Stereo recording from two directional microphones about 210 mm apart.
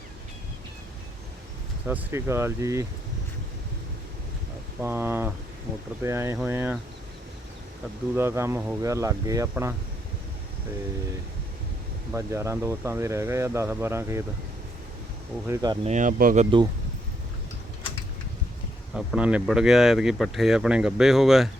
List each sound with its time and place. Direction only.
1.9 s speech: 10° right (ahead or behind)
4.8 s speech: 10° right (ahead or behind)
8.1 s speech: 10° right (ahead or behind)
12.1 s speech: 15° right (ahead or behind)
15.4 s speech: 20° right (ahead or behind)
15.9 s speech: 35° right (ahead or behind)
18.9 s speech: 5° right (ahead or behind)